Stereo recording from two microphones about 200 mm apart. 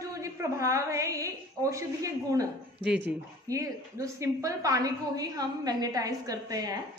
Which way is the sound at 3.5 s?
15° right (ahead or behind).